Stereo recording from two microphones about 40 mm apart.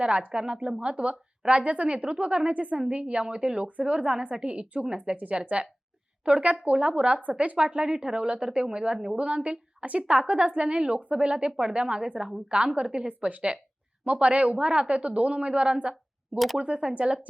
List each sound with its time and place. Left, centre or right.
0.3 s a woman's voice: right